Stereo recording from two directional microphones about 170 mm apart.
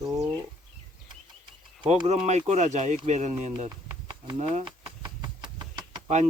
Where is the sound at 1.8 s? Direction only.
40° right (ahead or behind).